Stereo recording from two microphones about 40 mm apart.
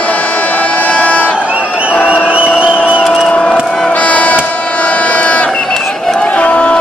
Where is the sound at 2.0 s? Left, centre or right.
Right.